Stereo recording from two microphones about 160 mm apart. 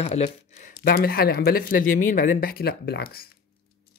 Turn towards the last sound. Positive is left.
turn(degrees=75)  # may be behind; listen again after turning